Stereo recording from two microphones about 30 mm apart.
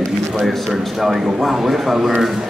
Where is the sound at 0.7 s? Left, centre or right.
Centre.